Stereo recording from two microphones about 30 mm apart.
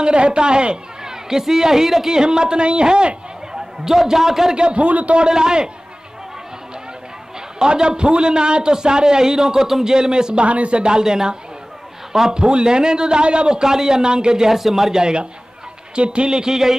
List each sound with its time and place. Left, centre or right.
0.0 s speech: right
1.0 s a woman's voice: centre
3.8 s a man's voice: centre
4.6 s speech: right
4.8 s speech: right
5.3 s a man's voice: right
7.5 s a man's voice: right
10.4 s speech: right
10.8 s a man's voice: right
13.6 s a man's voice: centre
14.5 s a man's voice: centre
15.0 s a man's voice: right